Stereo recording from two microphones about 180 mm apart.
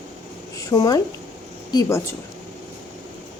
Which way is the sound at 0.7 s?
20° left (ahead or behind).